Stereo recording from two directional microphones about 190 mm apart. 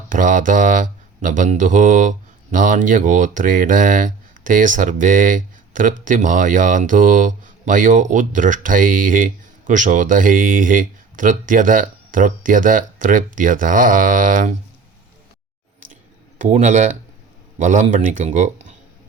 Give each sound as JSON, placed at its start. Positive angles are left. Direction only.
{"t": 0.1, "sound": "speech", "side_deg": -45}
{"t": 16.4, "sound": "speech", "side_deg": -40}